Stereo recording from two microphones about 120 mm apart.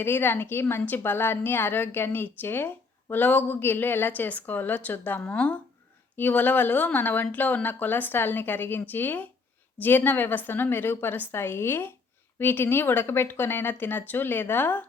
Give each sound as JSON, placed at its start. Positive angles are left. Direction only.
{"t": 0.0, "sound": "a woman's voice", "side_deg": 20}